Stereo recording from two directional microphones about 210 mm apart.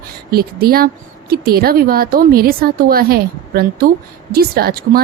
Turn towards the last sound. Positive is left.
turn(degrees=-45)  # may be behind; listen again after turning